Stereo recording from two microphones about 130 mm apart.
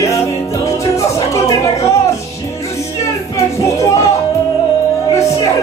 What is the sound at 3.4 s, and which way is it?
Music, 25° left (ahead or behind).